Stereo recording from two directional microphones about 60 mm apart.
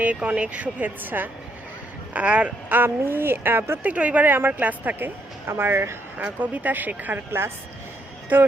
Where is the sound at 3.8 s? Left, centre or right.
Right.